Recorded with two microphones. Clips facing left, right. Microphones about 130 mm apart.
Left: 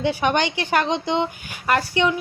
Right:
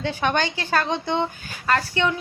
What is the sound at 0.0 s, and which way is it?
Speech, 15° left (ahead or behind).